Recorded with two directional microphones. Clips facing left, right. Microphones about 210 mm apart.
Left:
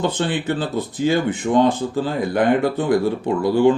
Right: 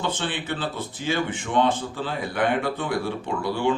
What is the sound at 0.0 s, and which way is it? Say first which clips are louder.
Speech: left 7 dB; 40° left (ahead or behind).